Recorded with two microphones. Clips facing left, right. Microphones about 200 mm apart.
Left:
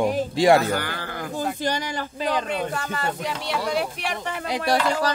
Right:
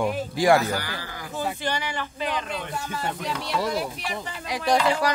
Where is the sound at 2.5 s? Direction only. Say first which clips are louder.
Left 5 dB; 65° left (ahead or behind).